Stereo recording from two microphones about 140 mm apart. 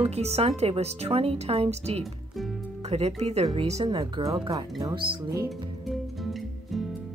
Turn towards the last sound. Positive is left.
turn(degrees=0)  # may be behind; listen again after turning